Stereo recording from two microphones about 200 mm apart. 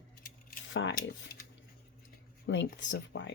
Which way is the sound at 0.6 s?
70° left (ahead or behind).